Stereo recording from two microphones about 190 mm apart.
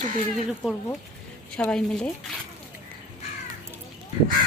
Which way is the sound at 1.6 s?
5° left (ahead or behind).